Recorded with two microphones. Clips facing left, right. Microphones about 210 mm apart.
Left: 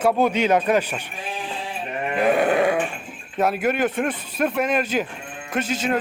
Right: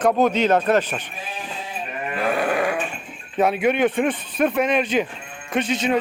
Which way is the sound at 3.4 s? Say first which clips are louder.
Right 2 dB; centre (ahead or behind).